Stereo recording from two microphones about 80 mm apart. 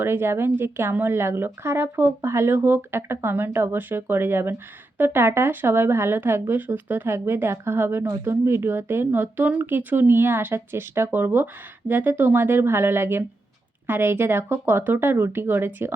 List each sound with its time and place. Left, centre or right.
0.0 s speech: right